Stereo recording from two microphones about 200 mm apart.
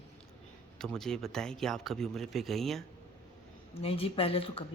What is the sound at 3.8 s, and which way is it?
Speech, 30° left (ahead or behind).